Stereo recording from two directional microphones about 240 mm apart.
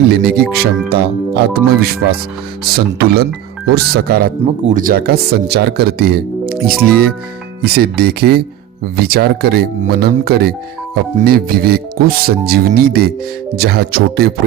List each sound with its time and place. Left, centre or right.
0.1 s speech: right